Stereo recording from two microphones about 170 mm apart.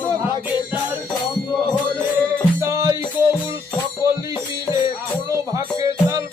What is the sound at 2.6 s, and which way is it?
Music, 20° right (ahead or behind).